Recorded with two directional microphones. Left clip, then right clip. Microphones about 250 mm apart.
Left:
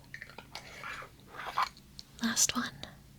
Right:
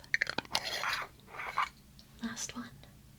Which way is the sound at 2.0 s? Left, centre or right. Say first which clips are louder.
Left 11 dB; left.